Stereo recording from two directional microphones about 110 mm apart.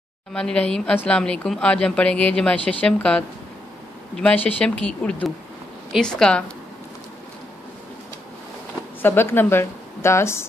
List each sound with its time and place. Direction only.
0.3 s a woman's voice: 10° left (ahead or behind)
9.0 s a woman's voice: 20° left (ahead or behind)